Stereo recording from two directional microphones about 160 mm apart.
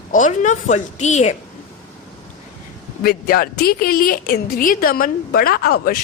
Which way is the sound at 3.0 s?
65° left (ahead or behind).